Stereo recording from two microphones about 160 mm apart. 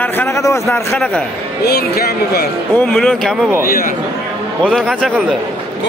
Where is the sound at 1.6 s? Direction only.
75° left (ahead or behind).